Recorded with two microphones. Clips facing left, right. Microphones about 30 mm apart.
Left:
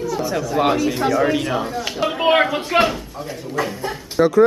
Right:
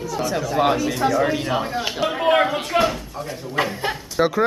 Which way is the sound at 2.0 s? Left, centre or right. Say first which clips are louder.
Left 2 dB; centre.